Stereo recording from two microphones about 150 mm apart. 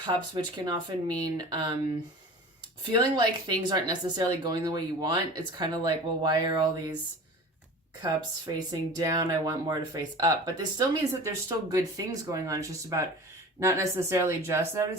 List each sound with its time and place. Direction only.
0.0 s speech: 30° right (ahead or behind)
2.9 s speech: 30° right (ahead or behind)
8.5 s speech: 25° right (ahead or behind)